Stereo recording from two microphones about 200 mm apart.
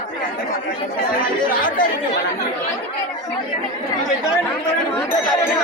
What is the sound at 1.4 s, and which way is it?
Speech, 45° left (ahead or behind).